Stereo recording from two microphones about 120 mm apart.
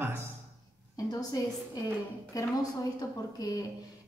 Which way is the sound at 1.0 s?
30° left (ahead or behind).